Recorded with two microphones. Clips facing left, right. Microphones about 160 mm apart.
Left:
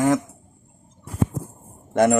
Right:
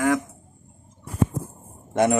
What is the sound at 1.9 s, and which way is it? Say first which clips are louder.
Speech: left 3 dB; 55° left (ahead or behind).